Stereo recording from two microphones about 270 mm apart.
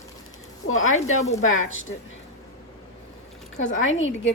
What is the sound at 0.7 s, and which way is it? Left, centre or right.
Speech, left.